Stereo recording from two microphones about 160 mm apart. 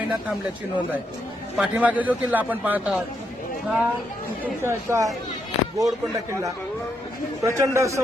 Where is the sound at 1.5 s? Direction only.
5° right (ahead or behind).